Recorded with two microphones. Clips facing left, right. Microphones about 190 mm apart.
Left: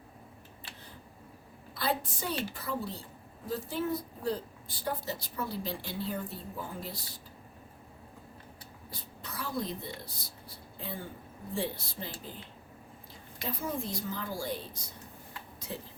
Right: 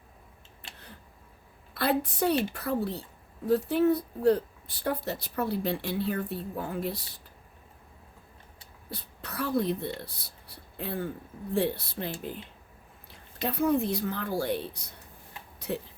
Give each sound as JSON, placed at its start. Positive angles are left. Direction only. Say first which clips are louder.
{"t": 1.7, "sound": "a woman's voice", "louder": "right 6 dB", "side_deg": -65}
{"t": 8.9, "sound": "speech", "louder": "right 5 dB", "side_deg": -65}
{"t": 13.4, "sound": "speech", "louder": "right 10 dB", "side_deg": -65}